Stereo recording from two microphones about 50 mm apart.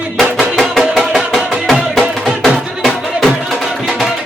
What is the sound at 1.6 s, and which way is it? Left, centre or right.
Music, centre.